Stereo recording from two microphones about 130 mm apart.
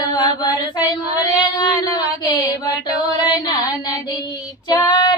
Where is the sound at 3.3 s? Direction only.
30° left (ahead or behind).